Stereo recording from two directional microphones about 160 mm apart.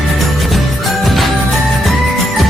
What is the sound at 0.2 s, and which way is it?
Music, centre (ahead or behind).